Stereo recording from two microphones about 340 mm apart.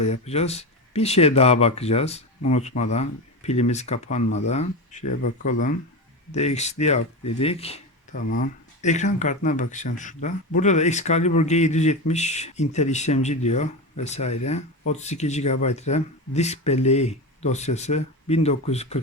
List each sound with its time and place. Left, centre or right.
0.0 s speech: centre